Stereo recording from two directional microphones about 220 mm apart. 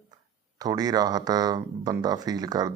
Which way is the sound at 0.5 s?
15° right (ahead or behind).